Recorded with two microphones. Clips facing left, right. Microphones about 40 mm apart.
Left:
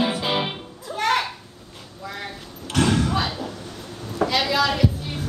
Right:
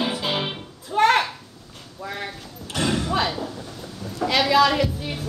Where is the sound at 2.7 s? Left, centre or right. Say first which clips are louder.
Left 3 dB; left.